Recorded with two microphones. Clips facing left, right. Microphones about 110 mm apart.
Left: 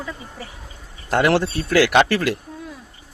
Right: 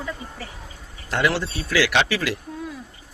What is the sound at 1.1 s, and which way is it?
A man's voice, 55° left (ahead or behind).